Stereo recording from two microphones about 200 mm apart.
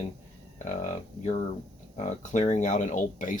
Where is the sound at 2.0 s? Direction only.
35° left (ahead or behind).